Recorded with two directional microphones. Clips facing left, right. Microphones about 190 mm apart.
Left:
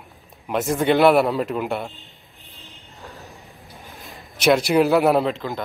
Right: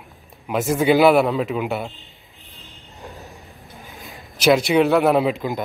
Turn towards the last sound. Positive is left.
turn(degrees=-15)  # may be behind; listen again after turning